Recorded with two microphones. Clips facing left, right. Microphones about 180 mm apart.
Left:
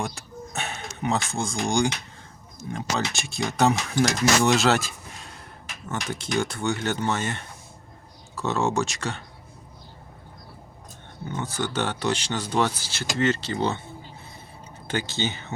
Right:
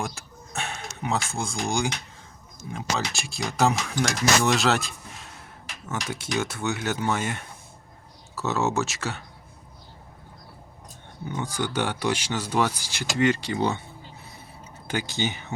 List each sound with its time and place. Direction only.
0.0 s a sound: centre (ahead or behind)
2.6 s speech: 5° right (ahead or behind)
11.3 s speech: 10° right (ahead or behind)
14.8 s speech: 10° right (ahead or behind)